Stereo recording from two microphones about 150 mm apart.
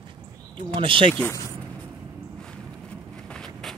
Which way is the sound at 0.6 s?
35° right (ahead or behind).